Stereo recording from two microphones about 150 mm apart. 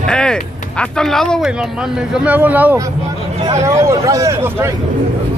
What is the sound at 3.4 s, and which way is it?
Speech, 20° right (ahead or behind).